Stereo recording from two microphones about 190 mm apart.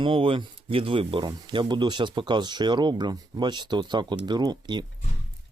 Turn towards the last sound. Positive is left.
turn(degrees=-20)  # may be behind; listen again after turning